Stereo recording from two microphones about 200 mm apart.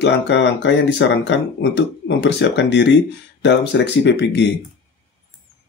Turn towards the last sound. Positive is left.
turn(degrees=60)  # may be behind; listen again after turning